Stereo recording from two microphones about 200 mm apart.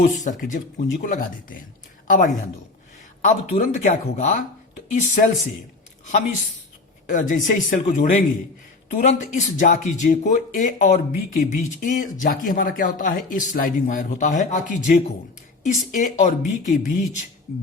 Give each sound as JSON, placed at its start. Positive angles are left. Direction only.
{"t": 0.0, "sound": "speech", "side_deg": 40}
{"t": 7.1, "sound": "speech", "side_deg": 40}